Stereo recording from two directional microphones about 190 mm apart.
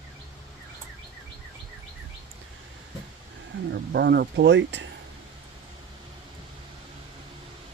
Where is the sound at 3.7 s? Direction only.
60° right (ahead or behind).